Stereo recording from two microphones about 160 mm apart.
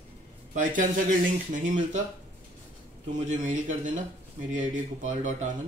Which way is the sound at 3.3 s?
50° right (ahead or behind).